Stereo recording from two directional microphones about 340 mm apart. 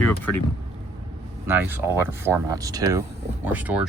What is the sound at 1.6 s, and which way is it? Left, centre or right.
Speech, centre.